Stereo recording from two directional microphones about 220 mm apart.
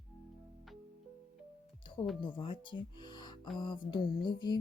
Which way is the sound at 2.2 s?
25° left (ahead or behind).